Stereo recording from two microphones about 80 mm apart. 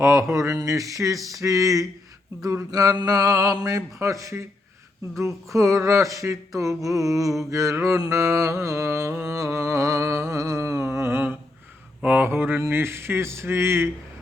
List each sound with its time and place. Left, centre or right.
0.0 s a sound: right
9.3 s music: right
12.0 s mantra: right
12.6 s speech: right